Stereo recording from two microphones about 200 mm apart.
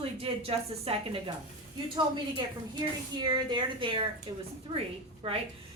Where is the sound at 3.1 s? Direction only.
20° right (ahead or behind).